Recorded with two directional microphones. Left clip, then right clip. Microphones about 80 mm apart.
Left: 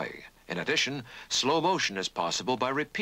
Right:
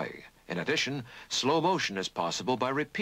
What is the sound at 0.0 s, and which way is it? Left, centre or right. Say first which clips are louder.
Speech: left 1 dB; right.